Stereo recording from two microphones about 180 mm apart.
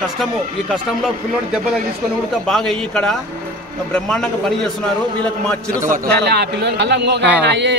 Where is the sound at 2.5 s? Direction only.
5° left (ahead or behind).